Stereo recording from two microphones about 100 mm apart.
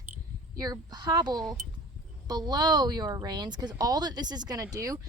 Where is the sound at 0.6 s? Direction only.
40° right (ahead or behind).